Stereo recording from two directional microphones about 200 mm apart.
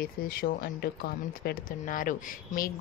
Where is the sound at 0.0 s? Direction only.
50° left (ahead or behind).